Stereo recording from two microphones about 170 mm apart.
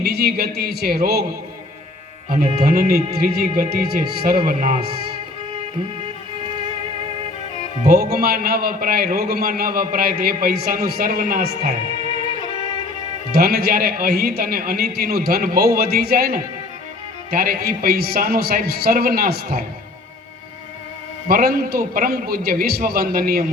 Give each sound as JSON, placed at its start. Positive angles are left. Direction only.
{"t": 0.0, "sound": "a man's voice", "side_deg": -65}
{"t": 2.3, "sound": "speech", "side_deg": -40}
{"t": 2.6, "sound": "a man's voice", "side_deg": -65}
{"t": 6.0, "sound": "music", "side_deg": -30}
{"t": 7.9, "sound": "a man's voice", "side_deg": -65}
{"t": 12.0, "sound": "music", "side_deg": 30}
{"t": 13.3, "sound": "a man's voice", "side_deg": -65}
{"t": 21.2, "sound": "a man's voice", "side_deg": -60}